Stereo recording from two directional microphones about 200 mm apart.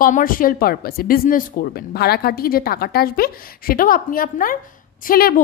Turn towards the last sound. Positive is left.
turn(degrees=45)  # may be behind; listen again after turning